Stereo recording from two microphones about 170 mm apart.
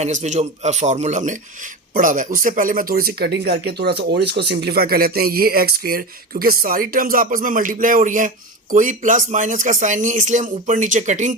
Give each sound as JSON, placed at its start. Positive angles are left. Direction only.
{"t": 0.0, "sound": "speech", "side_deg": -45}